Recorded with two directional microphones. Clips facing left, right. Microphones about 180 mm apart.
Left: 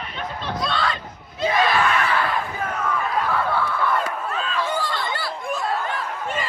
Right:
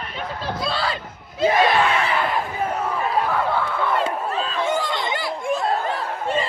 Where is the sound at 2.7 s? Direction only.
35° right (ahead or behind).